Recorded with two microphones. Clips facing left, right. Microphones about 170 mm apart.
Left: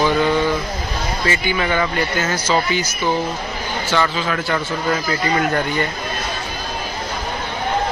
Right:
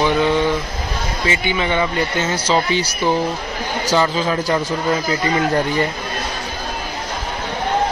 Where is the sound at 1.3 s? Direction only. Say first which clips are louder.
Right 1 dB; 20° right (ahead or behind).